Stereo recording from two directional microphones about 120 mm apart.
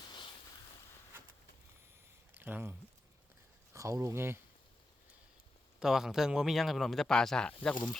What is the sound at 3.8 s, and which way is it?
Speech, 25° right (ahead or behind).